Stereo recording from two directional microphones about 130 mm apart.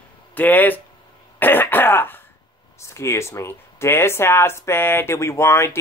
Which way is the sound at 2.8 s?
20° left (ahead or behind).